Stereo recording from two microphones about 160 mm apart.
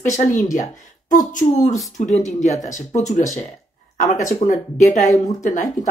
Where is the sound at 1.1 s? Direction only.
55° left (ahead or behind).